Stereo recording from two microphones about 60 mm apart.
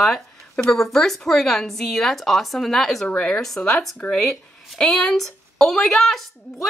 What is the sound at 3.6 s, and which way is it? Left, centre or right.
Speech, centre.